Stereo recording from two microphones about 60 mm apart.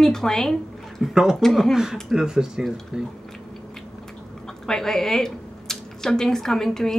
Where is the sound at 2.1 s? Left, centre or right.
Centre.